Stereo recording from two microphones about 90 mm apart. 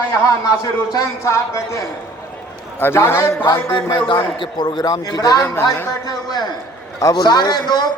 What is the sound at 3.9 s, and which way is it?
A man's voice, 65° left (ahead or behind).